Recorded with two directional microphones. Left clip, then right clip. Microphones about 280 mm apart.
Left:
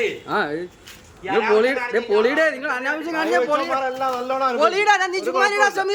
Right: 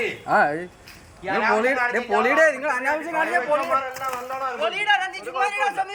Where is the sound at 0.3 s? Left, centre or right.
Centre.